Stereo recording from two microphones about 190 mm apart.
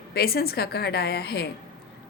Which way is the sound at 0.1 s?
55° left (ahead or behind).